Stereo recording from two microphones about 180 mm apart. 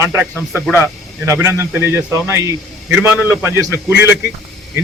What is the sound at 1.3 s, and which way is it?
A man's voice, 15° right (ahead or behind).